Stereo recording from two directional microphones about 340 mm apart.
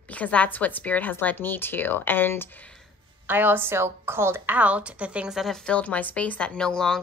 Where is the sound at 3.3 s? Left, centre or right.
Centre.